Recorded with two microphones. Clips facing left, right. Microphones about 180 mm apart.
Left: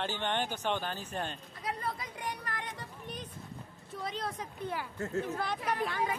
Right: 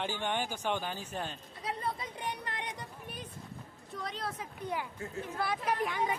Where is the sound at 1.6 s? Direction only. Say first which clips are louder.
Right 1 dB; 25° right (ahead or behind).